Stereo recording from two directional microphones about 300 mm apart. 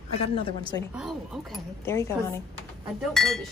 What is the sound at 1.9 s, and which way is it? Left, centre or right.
A woman's voice, centre.